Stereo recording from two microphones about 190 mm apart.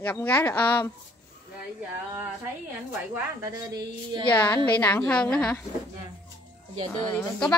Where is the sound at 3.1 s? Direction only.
15° right (ahead or behind).